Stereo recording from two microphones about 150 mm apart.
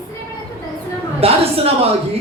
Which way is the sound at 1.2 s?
40° right (ahead or behind).